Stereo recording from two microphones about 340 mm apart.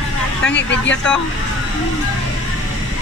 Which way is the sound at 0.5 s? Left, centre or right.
Left.